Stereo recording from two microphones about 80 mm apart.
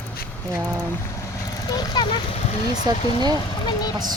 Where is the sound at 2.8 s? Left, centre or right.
Right.